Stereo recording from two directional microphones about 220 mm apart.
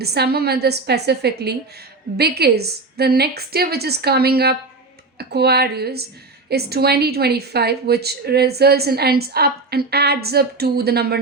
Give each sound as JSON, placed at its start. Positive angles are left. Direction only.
{"t": 0.0, "sound": "a woman's voice", "side_deg": -45}